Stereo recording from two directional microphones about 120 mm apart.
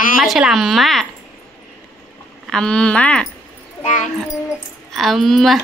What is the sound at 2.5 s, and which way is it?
Speech, 5° left (ahead or behind).